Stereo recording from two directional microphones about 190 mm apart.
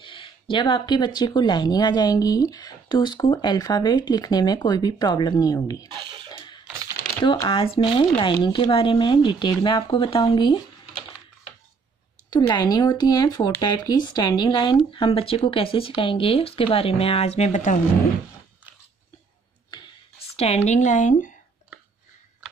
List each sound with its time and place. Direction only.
0.0 s speech: 25° left (ahead or behind)
5.9 s a sound: 20° right (ahead or behind)
6.3 s typing: 25° left (ahead or behind)
7.2 s speech: 30° left (ahead or behind)
12.3 s speech: 20° left (ahead or behind); by 17.7 s 40° left (ahead or behind)
20.6 s speech: 40° left (ahead or behind)